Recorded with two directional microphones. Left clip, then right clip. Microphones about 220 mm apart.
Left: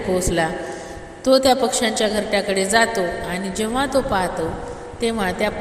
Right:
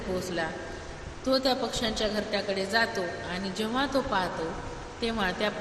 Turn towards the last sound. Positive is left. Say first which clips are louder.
# left 8 dB
turn(degrees=25)  # may be behind; listen again after turning